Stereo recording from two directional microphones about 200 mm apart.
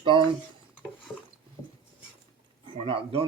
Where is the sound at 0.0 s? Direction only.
25° right (ahead or behind).